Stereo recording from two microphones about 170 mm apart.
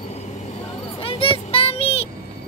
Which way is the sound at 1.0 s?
35° left (ahead or behind).